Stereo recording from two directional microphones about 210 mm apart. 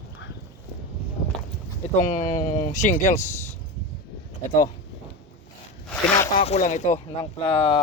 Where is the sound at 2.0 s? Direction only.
35° left (ahead or behind).